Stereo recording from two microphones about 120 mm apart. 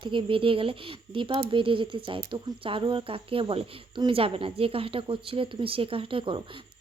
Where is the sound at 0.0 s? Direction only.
45° right (ahead or behind).